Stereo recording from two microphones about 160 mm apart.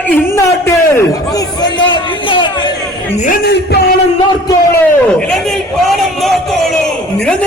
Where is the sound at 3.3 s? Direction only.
85° left.